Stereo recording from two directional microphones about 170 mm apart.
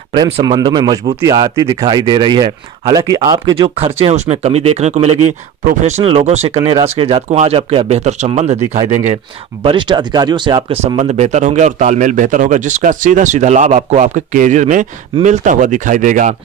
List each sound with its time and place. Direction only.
0.1 s speech: 25° right (ahead or behind)
9.6 s speech: 30° right (ahead or behind); by 16.3 s 50° right (ahead or behind)